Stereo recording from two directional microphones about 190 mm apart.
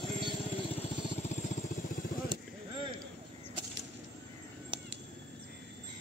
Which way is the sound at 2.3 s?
25° right (ahead or behind).